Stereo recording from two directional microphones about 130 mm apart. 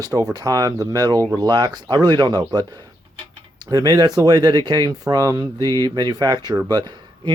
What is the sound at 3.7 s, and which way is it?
Speech, 25° right (ahead or behind).